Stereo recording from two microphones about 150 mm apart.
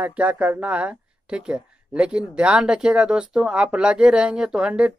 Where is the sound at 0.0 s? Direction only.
10° right (ahead or behind).